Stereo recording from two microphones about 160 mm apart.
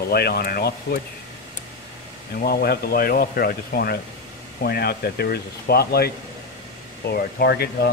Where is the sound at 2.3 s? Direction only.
70° left (ahead or behind).